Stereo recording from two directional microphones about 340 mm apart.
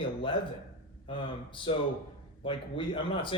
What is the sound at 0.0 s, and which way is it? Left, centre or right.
Speech, centre.